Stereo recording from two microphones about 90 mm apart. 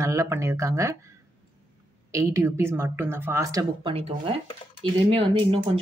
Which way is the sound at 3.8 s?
80° right.